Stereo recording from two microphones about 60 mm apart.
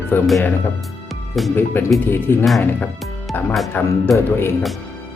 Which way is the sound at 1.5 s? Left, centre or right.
Left.